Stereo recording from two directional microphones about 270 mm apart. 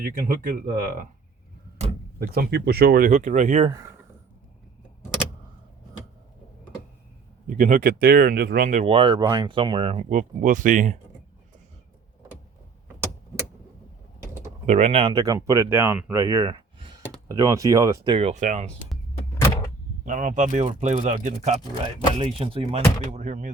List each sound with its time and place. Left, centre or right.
0.0 s speech: right
7.4 s speech: right
14.7 s speech: right
20.1 s speech: right